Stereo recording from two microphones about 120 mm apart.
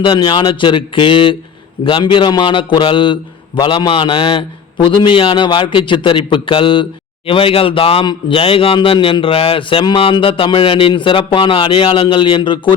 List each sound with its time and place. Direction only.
0.0 s speech: 40° left (ahead or behind)